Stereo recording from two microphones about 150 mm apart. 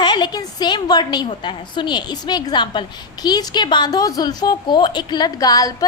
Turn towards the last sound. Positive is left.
turn(degrees=25)  # may be behind; listen again after turning